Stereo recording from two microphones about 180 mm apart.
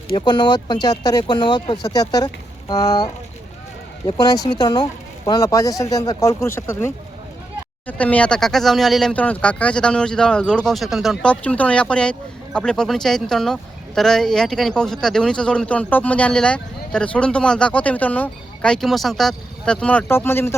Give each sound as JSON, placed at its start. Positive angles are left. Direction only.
{"t": 0.2, "sound": "speech", "side_deg": 25}